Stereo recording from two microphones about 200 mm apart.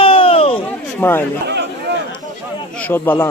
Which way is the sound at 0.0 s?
25° left (ahead or behind).